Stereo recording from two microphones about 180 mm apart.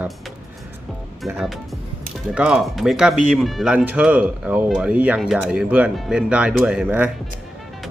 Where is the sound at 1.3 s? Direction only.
Centre (ahead or behind).